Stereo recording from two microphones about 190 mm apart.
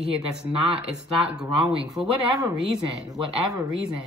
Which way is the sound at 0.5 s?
30° right (ahead or behind).